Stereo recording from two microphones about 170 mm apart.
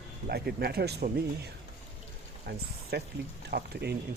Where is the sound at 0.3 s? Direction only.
70° right (ahead or behind).